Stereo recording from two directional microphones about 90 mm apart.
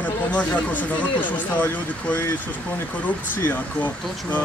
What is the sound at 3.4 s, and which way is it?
Speech, 20° left (ahead or behind).